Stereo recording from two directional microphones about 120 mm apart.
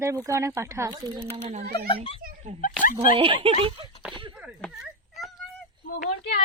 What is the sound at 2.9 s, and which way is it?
Speech, 45° right (ahead or behind).